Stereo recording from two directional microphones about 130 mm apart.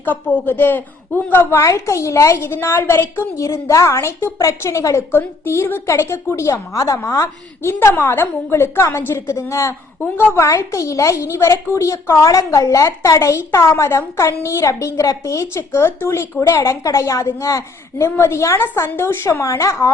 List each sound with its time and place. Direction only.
0.0 s a woman's voice: 15° left (ahead or behind)